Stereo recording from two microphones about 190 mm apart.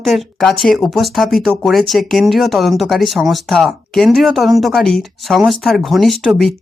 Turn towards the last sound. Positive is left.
turn(degrees=0)  # may be behind; listen again after turning